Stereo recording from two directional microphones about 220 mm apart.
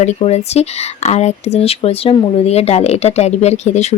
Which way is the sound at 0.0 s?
30° left (ahead or behind).